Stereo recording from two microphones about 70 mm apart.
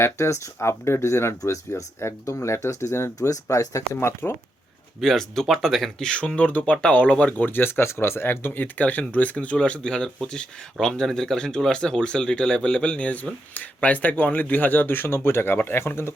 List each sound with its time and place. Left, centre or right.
0.0 s speech: left
3.2 s speech: left
3.9 s speech: left
4.9 s speech: centre; by 16.1 s left